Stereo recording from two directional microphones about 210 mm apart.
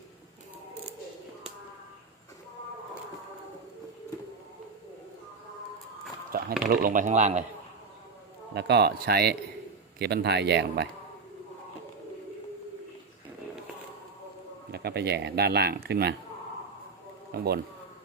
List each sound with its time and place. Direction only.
6.3 s a sound: 45° right (ahead or behind)
6.7 s speech: 40° right (ahead or behind)
8.5 s speech: 50° right (ahead or behind)
14.7 s speech: 50° right (ahead or behind)
17.3 s speech: 50° right (ahead or behind)